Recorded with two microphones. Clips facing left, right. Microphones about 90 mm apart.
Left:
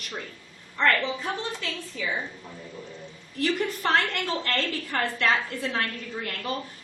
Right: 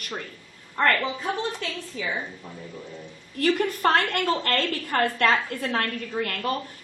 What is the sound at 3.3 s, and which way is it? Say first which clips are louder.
A woman's voice: right 3 dB; 50° right (ahead or behind).